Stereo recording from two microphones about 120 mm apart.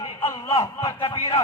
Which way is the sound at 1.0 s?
45° left (ahead or behind).